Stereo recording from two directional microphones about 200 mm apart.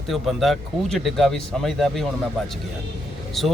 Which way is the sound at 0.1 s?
Centre (ahead or behind).